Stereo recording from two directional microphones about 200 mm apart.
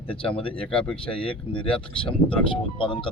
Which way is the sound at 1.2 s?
25° left (ahead or behind).